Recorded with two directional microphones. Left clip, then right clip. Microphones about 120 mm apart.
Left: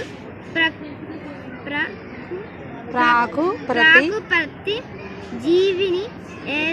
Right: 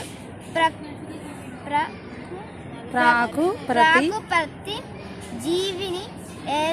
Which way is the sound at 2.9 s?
50° right (ahead or behind).